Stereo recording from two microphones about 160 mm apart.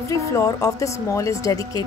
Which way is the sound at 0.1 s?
20° left (ahead or behind).